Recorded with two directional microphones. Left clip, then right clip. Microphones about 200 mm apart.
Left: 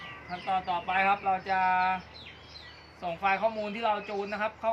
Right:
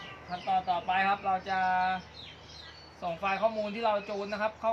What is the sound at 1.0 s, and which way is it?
Speech, 20° right (ahead or behind).